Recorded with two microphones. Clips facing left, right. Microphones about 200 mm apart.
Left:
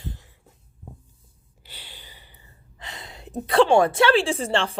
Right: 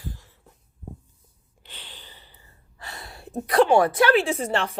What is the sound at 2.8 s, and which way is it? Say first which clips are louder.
A woman's voice: even; 20° left (ahead or behind).